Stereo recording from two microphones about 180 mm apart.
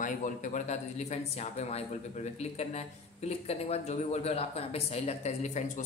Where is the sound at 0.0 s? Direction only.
45° left (ahead or behind).